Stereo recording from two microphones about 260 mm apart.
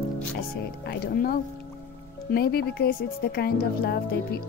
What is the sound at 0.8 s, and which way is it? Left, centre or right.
Speech, left.